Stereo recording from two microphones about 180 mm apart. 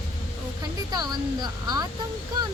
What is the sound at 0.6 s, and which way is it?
Speech, 20° right (ahead or behind).